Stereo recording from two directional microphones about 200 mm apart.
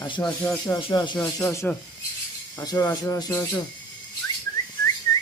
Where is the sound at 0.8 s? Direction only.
25° left (ahead or behind).